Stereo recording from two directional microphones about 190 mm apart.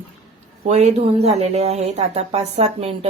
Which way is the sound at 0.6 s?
35° right (ahead or behind).